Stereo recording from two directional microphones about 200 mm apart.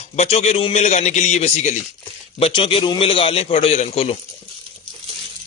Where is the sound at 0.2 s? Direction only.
30° left (ahead or behind).